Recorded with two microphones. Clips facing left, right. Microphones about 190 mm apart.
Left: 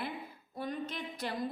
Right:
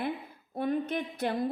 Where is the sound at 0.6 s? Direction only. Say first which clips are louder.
Right 8 dB; 55° right (ahead or behind).